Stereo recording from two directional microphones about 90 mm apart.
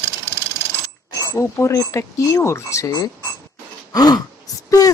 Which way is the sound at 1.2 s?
35° left (ahead or behind).